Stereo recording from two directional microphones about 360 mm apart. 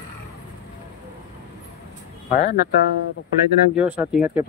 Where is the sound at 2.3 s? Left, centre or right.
Left.